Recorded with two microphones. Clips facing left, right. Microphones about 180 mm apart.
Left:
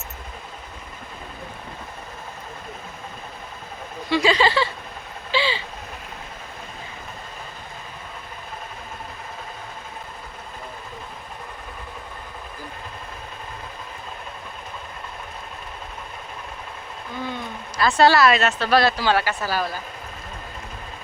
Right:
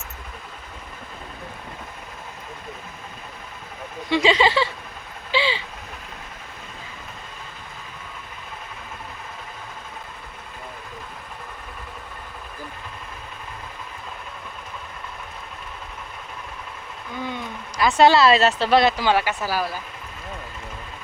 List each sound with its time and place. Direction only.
4.1 s speech: 20° right (ahead or behind)
5.3 s vehicle: 20° right (ahead or behind)
17.2 s speech: 15° right (ahead or behind)